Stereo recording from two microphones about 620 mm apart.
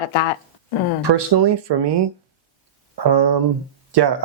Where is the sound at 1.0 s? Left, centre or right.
Right.